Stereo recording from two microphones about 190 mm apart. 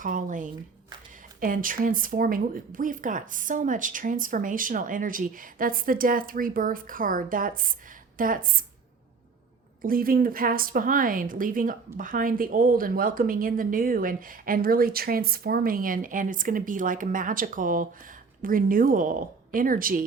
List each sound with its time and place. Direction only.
0.0 s a woman's voice: 45° right (ahead or behind)
9.8 s a woman's voice: 50° right (ahead or behind)